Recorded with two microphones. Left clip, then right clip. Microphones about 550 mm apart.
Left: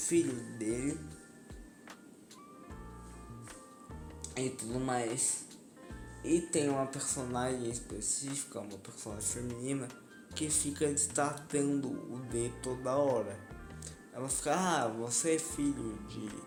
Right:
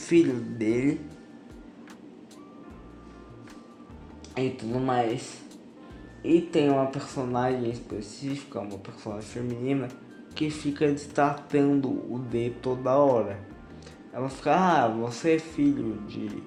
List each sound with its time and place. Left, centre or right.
0.1 s speech: left
4.4 s speech: left
6.2 s speech: left